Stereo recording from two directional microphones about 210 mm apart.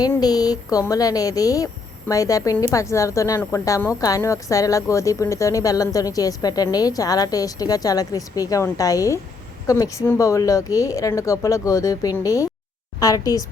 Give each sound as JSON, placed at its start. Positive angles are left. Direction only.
{"t": 0.0, "sound": "a woman's voice", "side_deg": 20}